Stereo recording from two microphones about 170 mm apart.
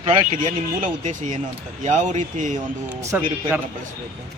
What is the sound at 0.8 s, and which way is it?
Speech, 50° right (ahead or behind).